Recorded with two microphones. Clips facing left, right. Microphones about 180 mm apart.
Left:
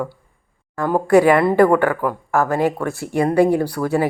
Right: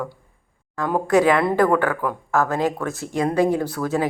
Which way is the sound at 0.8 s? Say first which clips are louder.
Left 4 dB; 5° left (ahead or behind).